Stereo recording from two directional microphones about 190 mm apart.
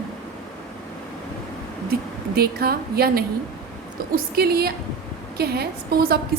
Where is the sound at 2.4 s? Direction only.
55° right (ahead or behind).